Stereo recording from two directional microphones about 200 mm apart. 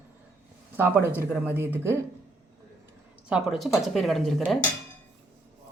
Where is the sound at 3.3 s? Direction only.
Centre (ahead or behind).